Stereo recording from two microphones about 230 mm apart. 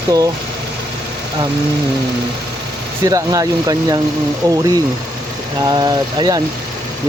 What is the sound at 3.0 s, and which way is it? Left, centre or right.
Speech, centre.